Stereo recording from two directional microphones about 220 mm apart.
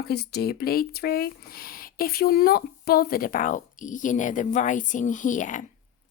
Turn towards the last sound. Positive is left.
turn(degrees=35)  # may be behind; listen again after turning